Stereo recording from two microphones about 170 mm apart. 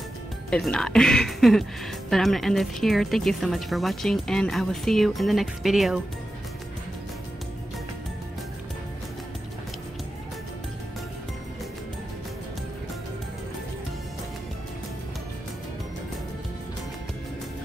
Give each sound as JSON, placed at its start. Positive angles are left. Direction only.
{"t": 0.5, "sound": "speech", "side_deg": 5}